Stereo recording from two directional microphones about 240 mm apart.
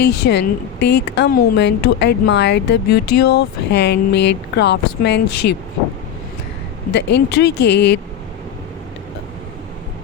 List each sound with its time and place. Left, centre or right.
0.0 s a woman's voice: left
6.9 s a woman's voice: left